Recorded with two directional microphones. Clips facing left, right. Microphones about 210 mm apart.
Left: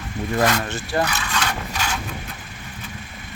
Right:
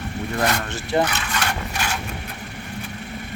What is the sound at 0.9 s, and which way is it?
Speech, 20° right (ahead or behind).